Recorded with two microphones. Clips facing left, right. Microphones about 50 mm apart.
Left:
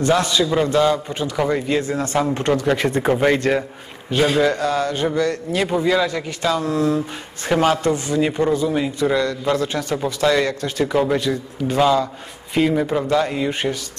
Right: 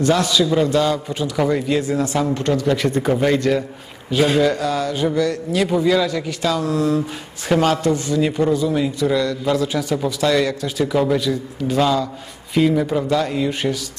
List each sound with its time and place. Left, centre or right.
0.0 s a man's voice: centre
2.3 s a man's voice: left
4.1 s a man's voice: centre
9.7 s a man's voice: centre